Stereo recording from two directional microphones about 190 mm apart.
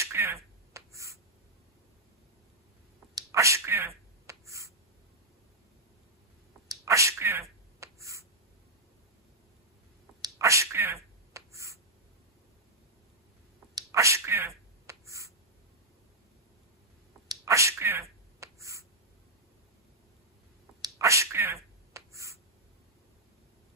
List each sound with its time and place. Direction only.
0.0 s finger snapping: 15° right (ahead or behind)
3.2 s sneeze: 15° right (ahead or behind)
6.7 s sneeze: 15° right (ahead or behind)
10.2 s a sound: 15° right (ahead or behind)
11.3 s finger snapping: 15° right (ahead or behind)
13.7 s sneeze: 15° right (ahead or behind)
17.3 s a sound: 15° right (ahead or behind)
20.8 s finger snapping: 15° right (ahead or behind)